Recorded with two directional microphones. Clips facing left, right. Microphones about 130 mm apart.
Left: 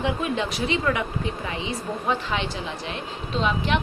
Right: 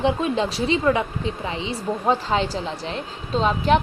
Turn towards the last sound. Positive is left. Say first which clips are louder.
# right 5 dB
turn(degrees=-40)  # may be behind; listen again after turning